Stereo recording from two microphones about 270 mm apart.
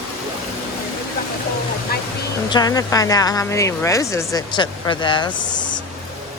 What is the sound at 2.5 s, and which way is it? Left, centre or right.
Speech, centre.